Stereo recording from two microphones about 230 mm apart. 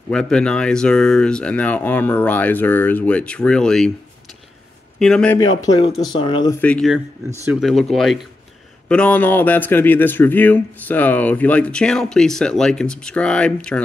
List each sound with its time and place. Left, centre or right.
0.1 s speech: centre
4.9 s speech: centre
5.6 s speech: centre
6.6 s speech: centre